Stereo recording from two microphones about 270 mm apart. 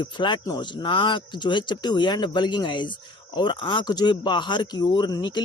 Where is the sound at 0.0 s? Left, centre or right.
Centre.